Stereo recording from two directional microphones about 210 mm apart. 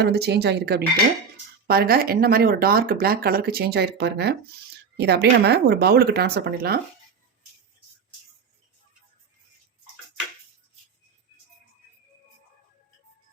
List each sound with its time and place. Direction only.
0.0 s speech: 50° right (ahead or behind)